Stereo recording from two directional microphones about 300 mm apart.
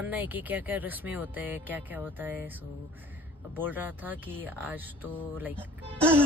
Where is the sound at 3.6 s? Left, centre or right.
Centre.